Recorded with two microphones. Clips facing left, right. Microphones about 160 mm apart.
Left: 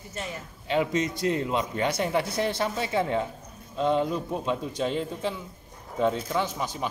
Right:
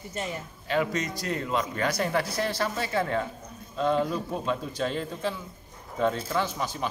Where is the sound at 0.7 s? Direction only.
25° left (ahead or behind).